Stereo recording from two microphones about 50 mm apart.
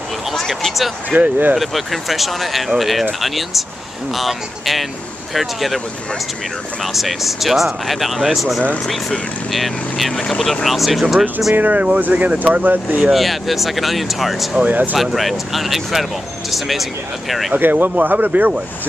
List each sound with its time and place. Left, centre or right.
0.3 s speech: centre
1.1 s speech: right
1.6 s speech: centre
11.5 s speech: right
13.1 s speech: centre
14.6 s speech: right
15.0 s speech: centre
17.6 s speech: right